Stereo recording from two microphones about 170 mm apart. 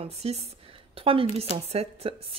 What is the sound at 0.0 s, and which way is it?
A woman's voice, 40° right (ahead or behind).